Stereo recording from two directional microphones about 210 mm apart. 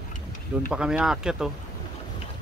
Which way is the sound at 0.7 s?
5° right (ahead or behind).